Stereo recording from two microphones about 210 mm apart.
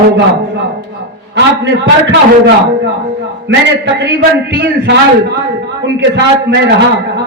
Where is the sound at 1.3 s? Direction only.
60° right (ahead or behind).